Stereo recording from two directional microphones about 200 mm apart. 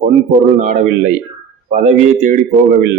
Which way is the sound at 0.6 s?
35° right (ahead or behind).